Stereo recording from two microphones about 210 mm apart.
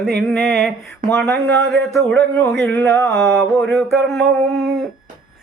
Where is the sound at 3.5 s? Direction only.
Centre (ahead or behind).